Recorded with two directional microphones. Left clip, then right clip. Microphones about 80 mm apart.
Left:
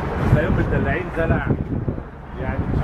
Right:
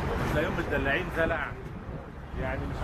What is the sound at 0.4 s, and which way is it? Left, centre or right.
Speech, right.